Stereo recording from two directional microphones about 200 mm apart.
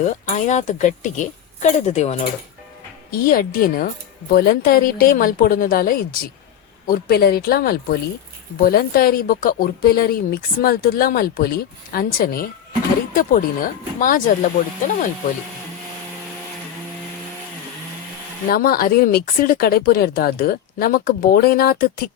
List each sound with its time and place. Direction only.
0.0 s speech: 35° left (ahead or behind)
3.1 s speech: 45° left (ahead or behind)
18.4 s speech: 50° left (ahead or behind)